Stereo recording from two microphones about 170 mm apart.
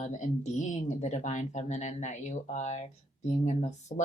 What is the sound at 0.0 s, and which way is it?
Speech, 45° left (ahead or behind).